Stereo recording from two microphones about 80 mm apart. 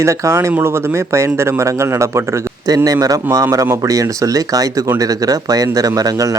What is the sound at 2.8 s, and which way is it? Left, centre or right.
A man's voice, right.